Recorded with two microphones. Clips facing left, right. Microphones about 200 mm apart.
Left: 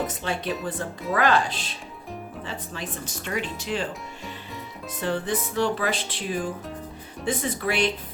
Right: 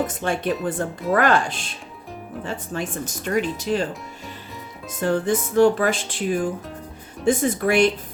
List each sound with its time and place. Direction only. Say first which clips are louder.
0.2 s music: right 5 dB; 50° right (ahead or behind)
3.6 s speech: right 6 dB; 40° right (ahead or behind)
4.9 s music: right 6 dB; 45° right (ahead or behind)